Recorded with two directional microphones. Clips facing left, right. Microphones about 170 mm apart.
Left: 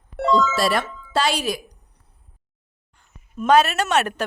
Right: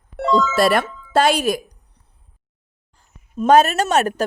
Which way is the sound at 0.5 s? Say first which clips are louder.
Right 5 dB; 55° right (ahead or behind).